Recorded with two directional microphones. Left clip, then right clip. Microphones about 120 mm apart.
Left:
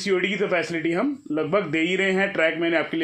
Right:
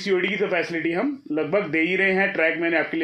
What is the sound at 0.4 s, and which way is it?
A man's voice, 40° left (ahead or behind).